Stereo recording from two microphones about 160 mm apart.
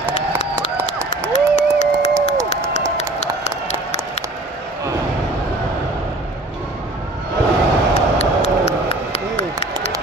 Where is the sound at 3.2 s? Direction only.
45° left (ahead or behind).